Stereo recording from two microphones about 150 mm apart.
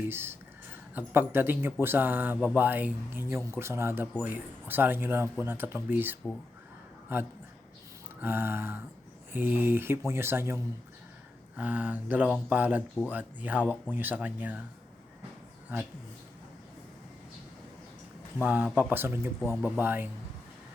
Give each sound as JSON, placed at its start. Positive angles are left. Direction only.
{"t": 0.1, "sound": "speech", "side_deg": -15}
{"t": 15.7, "sound": "speech", "side_deg": -10}
{"t": 18.4, "sound": "speech", "side_deg": -10}